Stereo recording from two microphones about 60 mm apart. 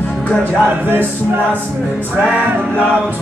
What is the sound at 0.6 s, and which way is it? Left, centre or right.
Music, right.